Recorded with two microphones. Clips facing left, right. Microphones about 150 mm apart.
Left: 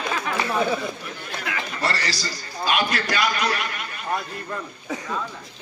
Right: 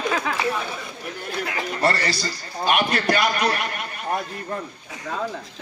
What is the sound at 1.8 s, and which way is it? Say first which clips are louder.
Music: right 5 dB; 55° right (ahead or behind).